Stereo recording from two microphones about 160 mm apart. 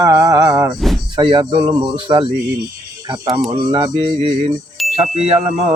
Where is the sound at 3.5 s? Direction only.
30° right (ahead or behind).